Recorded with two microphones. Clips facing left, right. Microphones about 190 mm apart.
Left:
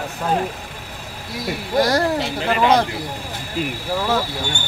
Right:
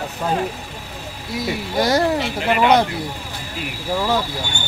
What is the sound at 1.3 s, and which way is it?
Speech, centre (ahead or behind).